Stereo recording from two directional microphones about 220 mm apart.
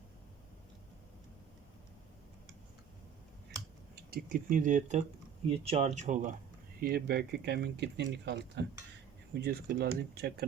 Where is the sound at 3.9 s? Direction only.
40° right (ahead or behind).